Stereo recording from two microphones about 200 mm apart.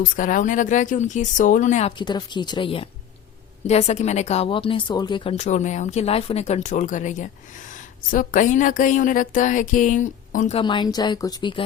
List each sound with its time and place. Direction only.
0.0 s a woman's voice: 45° left (ahead or behind)
2.0 s a woman's voice: 20° left (ahead or behind); by 10.6 s 40° left (ahead or behind)
10.6 s speech: 25° left (ahead or behind)